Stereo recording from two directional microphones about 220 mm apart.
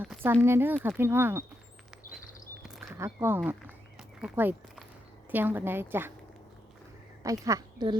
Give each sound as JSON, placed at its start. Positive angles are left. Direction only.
{"t": 0.0, "sound": "speech", "side_deg": -10}
{"t": 3.0, "sound": "speech", "side_deg": -10}
{"t": 7.2, "sound": "speech", "side_deg": -15}